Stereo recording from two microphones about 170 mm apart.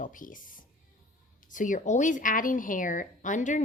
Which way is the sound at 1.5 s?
50° left (ahead or behind).